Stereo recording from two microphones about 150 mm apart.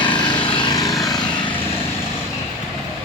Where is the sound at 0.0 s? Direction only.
30° left (ahead or behind).